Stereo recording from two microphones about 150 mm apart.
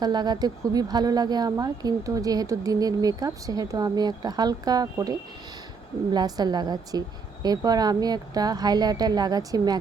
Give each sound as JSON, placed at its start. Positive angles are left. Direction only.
{"t": 0.0, "sound": "speech", "side_deg": -30}